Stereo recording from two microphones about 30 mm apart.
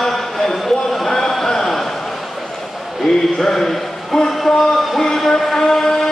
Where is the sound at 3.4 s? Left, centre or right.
Centre.